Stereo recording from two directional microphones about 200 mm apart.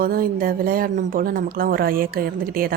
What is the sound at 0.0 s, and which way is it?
A woman's voice, 45° right (ahead or behind).